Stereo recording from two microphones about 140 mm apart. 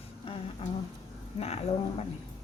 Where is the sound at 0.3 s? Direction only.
40° left (ahead or behind).